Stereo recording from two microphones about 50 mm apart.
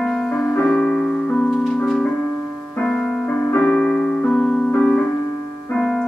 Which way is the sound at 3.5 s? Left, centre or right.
Left.